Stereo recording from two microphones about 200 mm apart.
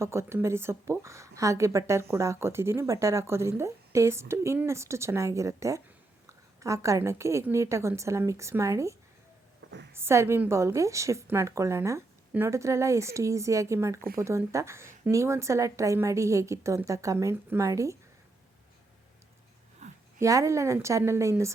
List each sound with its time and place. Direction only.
0.0 s speech: 15° right (ahead or behind)
19.8 s a sound: 35° right (ahead or behind)
20.1 s speech: 15° right (ahead or behind)